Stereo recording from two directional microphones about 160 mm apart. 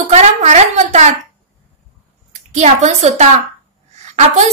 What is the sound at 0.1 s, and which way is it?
A woman's voice, 45° right (ahead or behind).